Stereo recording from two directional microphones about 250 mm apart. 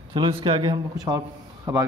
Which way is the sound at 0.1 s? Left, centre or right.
Centre.